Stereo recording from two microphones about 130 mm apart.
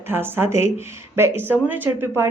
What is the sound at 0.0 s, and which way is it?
A woman's voice, 15° right (ahead or behind).